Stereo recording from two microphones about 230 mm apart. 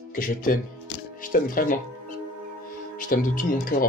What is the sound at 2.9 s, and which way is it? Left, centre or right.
Speech, left.